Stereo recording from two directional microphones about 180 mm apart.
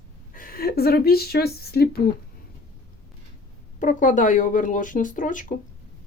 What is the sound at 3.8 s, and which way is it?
A woman's voice, 45° left (ahead or behind).